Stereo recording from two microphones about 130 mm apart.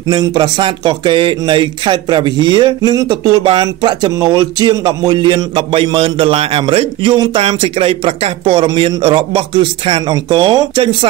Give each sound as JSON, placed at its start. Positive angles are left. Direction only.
{"t": 0.2, "sound": "speech", "side_deg": -35}